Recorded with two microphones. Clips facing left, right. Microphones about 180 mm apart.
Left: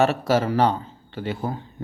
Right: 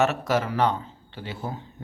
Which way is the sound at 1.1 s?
50° left (ahead or behind).